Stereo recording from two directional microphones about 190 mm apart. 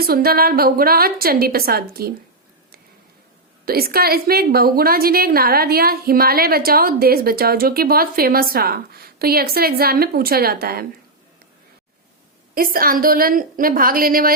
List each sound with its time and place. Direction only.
0.0 s a woman's voice: 55° right (ahead or behind)
3.7 s a woman's voice: 55° right (ahead or behind)
12.5 s a woman's voice: 50° right (ahead or behind)